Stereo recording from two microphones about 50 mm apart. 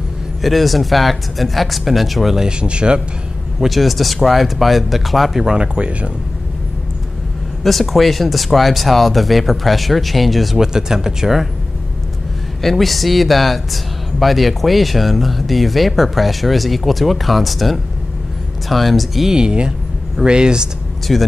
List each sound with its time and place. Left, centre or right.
0.4 s speech: centre
2.4 s speech: centre
3.5 s speech: centre
5.4 s speech: centre
7.6 s speech: centre
10.6 s speech: centre
12.6 s speech: centre
19.3 s speech: centre
21.1 s speech: centre